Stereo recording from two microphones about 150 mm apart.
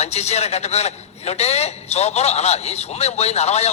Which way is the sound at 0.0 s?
45° left (ahead or behind).